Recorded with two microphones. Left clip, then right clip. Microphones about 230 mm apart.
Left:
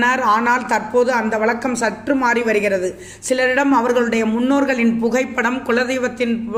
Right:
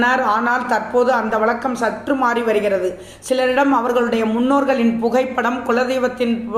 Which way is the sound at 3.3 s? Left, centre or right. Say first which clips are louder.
Even; left.